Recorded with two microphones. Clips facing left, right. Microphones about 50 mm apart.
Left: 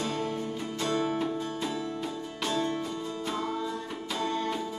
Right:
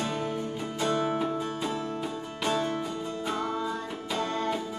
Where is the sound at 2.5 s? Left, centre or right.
Right.